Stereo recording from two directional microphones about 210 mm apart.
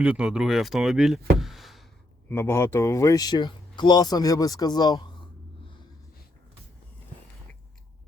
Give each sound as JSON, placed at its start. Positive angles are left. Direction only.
{"t": 0.0, "sound": "speech", "side_deg": -5}
{"t": 1.4, "sound": "a sound", "side_deg": 0}
{"t": 2.3, "sound": "speech", "side_deg": 10}